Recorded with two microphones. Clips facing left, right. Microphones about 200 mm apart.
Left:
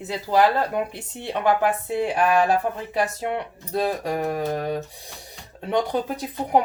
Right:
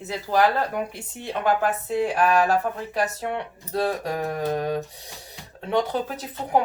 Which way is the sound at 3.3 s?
15° left (ahead or behind).